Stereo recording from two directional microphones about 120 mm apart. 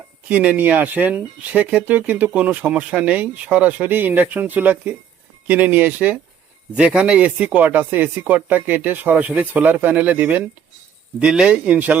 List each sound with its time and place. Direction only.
0.3 s speech: 15° right (ahead or behind)